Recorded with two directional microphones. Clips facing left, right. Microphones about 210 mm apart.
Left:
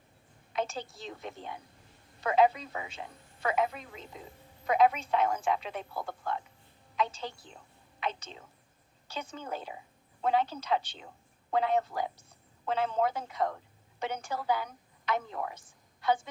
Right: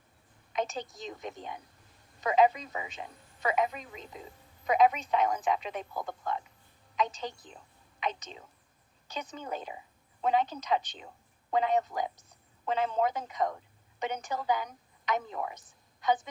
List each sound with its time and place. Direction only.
0.5 s a woman's voice: 15° right (ahead or behind)
2.4 s speech: centre (ahead or behind)
4.9 s a woman's voice: 15° right (ahead or behind)
9.7 s a sound: 5° right (ahead or behind)
10.3 s a woman's voice: 15° right (ahead or behind)
15.3 s speech: 5° right (ahead or behind)